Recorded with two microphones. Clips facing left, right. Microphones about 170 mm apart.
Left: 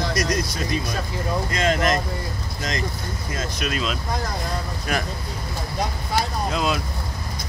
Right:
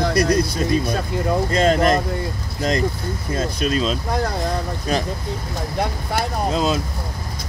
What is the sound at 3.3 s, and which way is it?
Speech, 35° right (ahead or behind).